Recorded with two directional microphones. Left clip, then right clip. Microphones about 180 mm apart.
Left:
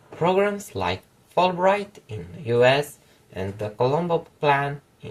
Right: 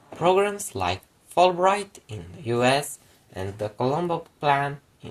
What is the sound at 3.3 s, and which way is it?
Speech, 40° right (ahead or behind).